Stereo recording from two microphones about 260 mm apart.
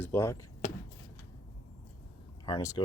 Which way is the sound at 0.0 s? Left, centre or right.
Centre.